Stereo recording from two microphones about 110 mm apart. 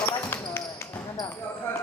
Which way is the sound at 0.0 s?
20° left (ahead or behind).